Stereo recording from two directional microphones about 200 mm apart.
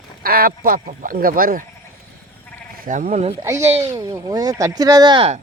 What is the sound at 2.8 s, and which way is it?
Speech, 40° right (ahead or behind).